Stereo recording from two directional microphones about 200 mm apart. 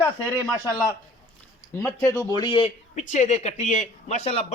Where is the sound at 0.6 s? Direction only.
20° left (ahead or behind).